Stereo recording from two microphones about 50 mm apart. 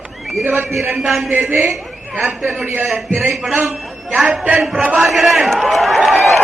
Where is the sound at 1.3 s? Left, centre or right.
Right.